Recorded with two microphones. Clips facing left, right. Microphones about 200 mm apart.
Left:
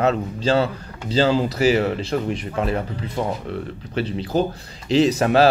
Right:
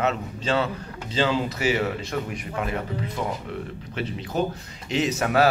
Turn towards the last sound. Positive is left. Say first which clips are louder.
# left 6 dB
turn(degrees=30)  # may be behind; listen again after turning